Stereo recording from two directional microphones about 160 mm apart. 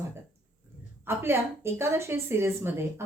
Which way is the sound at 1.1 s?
15° right (ahead or behind).